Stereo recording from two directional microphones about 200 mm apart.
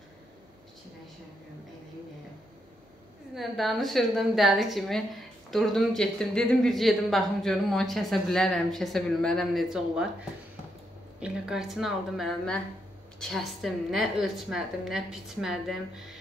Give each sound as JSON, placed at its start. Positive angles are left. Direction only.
{"t": 3.3, "sound": "a woman's voice", "side_deg": 0}
{"t": 11.1, "sound": "a woman's voice", "side_deg": -5}